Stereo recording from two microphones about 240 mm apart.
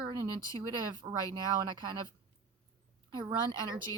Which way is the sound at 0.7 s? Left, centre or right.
Centre.